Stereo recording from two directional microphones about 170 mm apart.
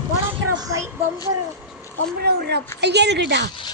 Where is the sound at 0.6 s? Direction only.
20° right (ahead or behind).